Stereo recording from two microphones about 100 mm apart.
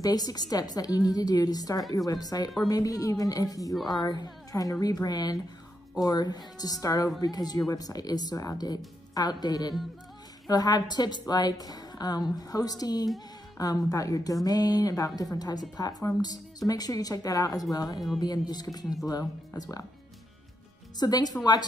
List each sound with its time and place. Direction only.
0.0 s a woman's voice: 40° left (ahead or behind)
21.0 s a woman's voice: 40° left (ahead or behind)